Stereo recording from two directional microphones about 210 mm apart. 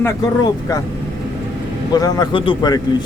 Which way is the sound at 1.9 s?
20° left (ahead or behind).